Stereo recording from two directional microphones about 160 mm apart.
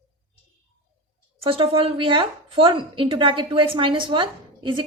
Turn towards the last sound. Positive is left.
turn(degrees=-30)  # may be behind; listen again after turning